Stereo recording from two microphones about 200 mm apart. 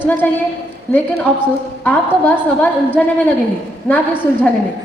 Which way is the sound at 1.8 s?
10° left (ahead or behind).